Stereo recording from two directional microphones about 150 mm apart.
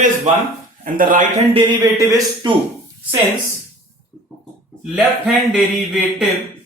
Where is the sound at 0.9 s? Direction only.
65° right (ahead or behind).